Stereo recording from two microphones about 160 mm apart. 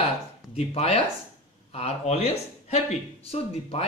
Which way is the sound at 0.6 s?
40° left (ahead or behind).